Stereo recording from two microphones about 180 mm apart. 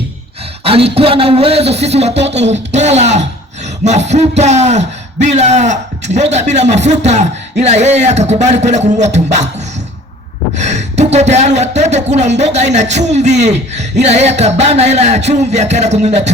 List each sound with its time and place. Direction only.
0.6 s a man's voice: 30° right (ahead or behind)
10.6 s a man's voice: 40° right (ahead or behind)